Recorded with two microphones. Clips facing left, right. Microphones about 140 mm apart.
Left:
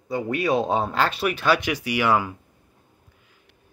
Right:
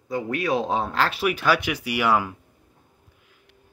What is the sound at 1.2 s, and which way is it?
Speech, 10° right (ahead or behind).